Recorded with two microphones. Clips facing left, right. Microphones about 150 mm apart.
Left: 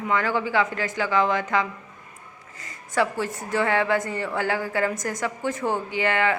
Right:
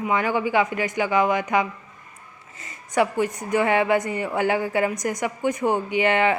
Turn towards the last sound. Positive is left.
turn(degrees=-20)  # may be behind; listen again after turning